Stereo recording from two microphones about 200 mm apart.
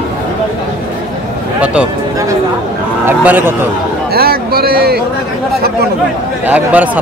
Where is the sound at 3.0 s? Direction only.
10° right (ahead or behind).